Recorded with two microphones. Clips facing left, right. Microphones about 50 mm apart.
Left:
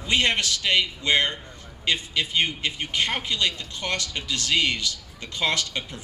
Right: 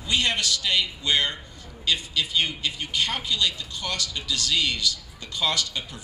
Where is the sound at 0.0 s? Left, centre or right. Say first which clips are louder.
Left 2 dB; left.